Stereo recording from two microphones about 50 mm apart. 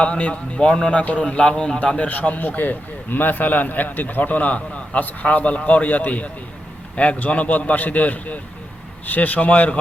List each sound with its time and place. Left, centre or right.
0.0 s a man's voice: left
1.2 s a man's voice: centre
1.8 s a man's voice: left